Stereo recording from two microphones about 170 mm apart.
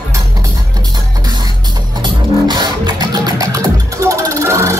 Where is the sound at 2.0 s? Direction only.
25° right (ahead or behind).